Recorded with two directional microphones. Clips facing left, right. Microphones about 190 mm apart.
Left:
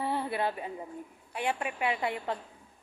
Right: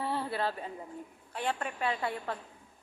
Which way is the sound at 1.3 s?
15° left (ahead or behind).